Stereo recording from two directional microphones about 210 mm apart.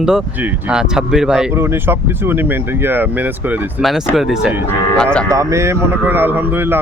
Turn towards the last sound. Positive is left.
turn(degrees=-10)  # may be behind; listen again after turning